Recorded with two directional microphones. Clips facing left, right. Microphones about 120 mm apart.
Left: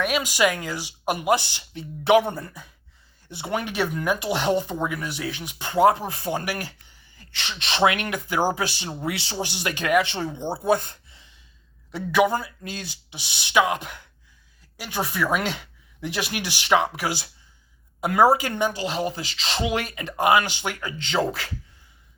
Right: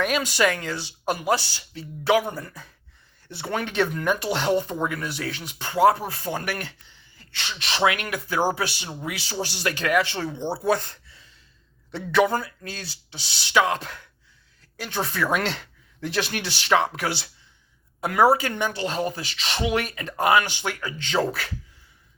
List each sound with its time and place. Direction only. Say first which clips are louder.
0.0 s speech: even; 5° left (ahead or behind); by 2.5 s 25° left (ahead or behind)
2.5 s speech: even; 5° left (ahead or behind)
8.5 s speech: left 1 dB; 30° left (ahead or behind)
11.9 s speech: even; 10° left (ahead or behind)
19.0 s speech: even; 30° left (ahead or behind)